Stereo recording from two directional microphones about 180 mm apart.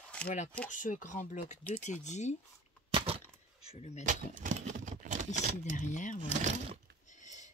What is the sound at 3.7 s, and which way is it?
Speech, 40° left (ahead or behind).